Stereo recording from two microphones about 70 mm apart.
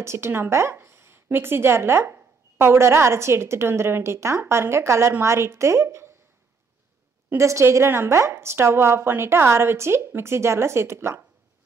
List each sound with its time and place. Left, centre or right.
0.0 s a woman's voice: right
7.3 s a woman's voice: right